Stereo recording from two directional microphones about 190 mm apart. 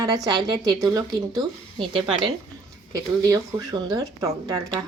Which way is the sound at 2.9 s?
15° right (ahead or behind).